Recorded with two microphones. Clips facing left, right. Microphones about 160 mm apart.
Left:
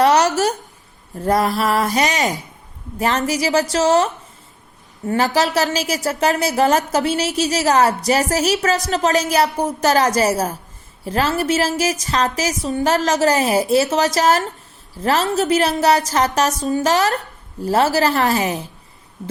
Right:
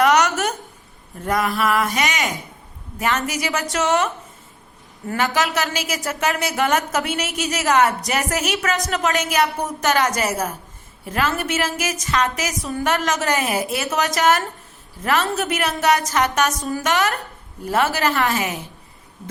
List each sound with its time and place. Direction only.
0.0 s a sound: 30° left (ahead or behind)
1.2 s a woman's voice: 35° left (ahead or behind)
16.6 s a woman's voice: 20° left (ahead or behind)
17.6 s a woman's voice: 35° left (ahead or behind)